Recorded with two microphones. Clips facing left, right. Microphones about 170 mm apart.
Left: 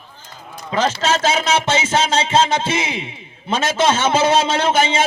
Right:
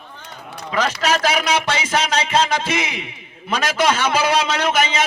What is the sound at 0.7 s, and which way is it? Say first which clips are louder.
A man's voice: left 2 dB; 25° left (ahead or behind).